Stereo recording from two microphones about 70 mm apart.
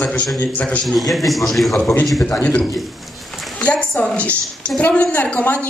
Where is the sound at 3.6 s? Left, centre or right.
Centre.